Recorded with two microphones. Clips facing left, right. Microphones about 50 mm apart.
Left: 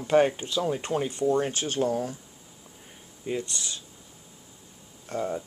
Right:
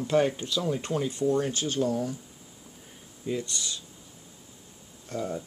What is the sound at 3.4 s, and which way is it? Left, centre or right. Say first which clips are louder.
Speech: even; left.